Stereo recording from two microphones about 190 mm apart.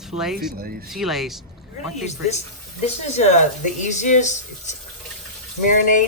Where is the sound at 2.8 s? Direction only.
35° left (ahead or behind).